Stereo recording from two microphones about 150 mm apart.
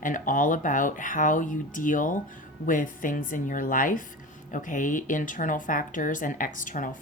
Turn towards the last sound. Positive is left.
turn(degrees=60)  # may be behind; listen again after turning